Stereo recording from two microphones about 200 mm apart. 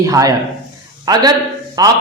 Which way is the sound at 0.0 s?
15° right (ahead or behind).